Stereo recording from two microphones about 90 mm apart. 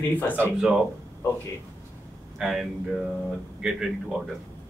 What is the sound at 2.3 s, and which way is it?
A man's voice, 5° right (ahead or behind).